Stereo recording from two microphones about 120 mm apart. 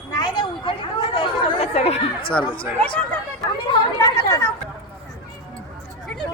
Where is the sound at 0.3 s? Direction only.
45° left (ahead or behind).